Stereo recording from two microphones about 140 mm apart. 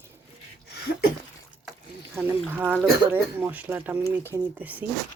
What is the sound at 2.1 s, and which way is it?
Speech, 10° right (ahead or behind).